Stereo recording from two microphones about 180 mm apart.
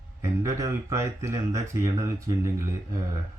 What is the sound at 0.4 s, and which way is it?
Speech, 20° right (ahead or behind).